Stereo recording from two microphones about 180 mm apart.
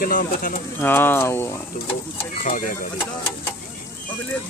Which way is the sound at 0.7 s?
10° left (ahead or behind).